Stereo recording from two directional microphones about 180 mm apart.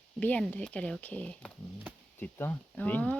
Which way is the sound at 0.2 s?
5° left (ahead or behind).